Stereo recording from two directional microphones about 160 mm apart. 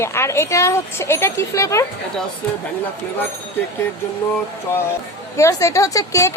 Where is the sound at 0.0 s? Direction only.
15° left (ahead or behind).